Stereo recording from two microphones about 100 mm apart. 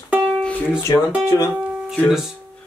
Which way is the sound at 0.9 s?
45° left (ahead or behind).